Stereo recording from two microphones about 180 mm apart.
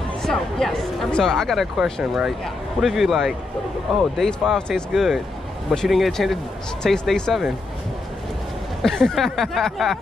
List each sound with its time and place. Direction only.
0.2 s speech: centre (ahead or behind)
8.8 s speech: centre (ahead or behind)